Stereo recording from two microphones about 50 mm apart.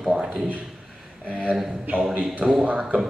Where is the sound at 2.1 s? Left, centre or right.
Right.